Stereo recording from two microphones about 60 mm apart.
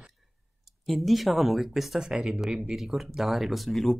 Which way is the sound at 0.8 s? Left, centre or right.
Centre.